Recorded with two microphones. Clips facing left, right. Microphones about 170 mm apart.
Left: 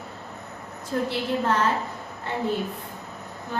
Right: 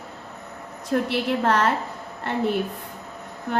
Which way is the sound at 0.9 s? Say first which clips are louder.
Right 3 dB; 70° right (ahead or behind).